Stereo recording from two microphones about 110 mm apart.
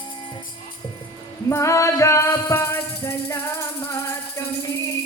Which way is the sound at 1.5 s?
25° left (ahead or behind).